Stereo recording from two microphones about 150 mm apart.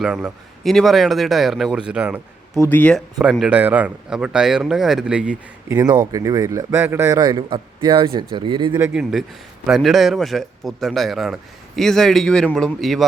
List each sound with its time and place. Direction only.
0.0 s a man's voice: 5° right (ahead or behind)
2.6 s speech: 10° left (ahead or behind)
3.2 s a man's voice: 5° right (ahead or behind)
5.6 s speech: 15° right (ahead or behind)
7.2 s speech: 30° right (ahead or behind)
8.9 s a man's voice: 5° right (ahead or behind)